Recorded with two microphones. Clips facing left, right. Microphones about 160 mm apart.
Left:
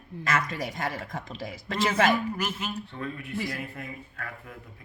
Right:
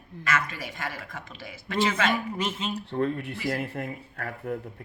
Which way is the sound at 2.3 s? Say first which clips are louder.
Right 2 dB; 25° right (ahead or behind).